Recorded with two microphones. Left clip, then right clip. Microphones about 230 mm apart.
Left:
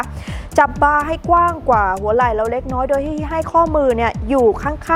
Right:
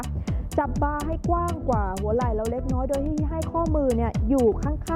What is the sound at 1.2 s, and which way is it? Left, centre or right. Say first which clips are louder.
Speech: left 12 dB; centre.